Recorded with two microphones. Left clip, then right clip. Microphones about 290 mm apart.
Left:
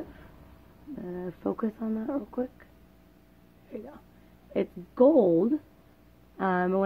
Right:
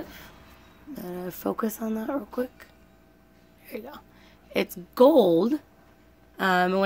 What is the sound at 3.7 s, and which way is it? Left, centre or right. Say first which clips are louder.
A woman's voice: right 4 dB; centre.